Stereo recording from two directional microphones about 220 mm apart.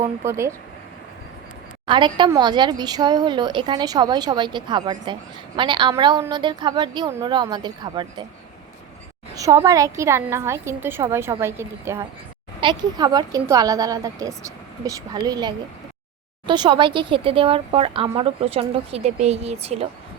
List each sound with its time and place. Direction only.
0.3 s speech: 10° right (ahead or behind)
1.9 s speech: 20° right (ahead or behind)
9.3 s a sound: 15° right (ahead or behind)
9.6 s speech: 15° right (ahead or behind)